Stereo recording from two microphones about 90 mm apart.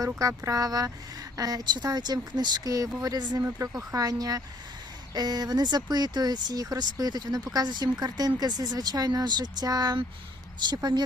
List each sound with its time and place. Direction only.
0.0 s speech: 40° right (ahead or behind)